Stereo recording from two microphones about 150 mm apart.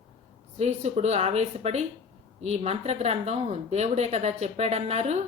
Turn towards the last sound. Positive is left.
turn(degrees=-45)  # may be behind; listen again after turning